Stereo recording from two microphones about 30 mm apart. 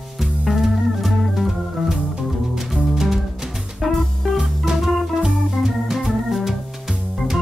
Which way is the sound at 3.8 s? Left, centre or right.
Centre.